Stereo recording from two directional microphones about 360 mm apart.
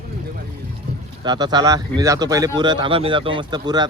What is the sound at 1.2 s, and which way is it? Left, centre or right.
Speech, centre.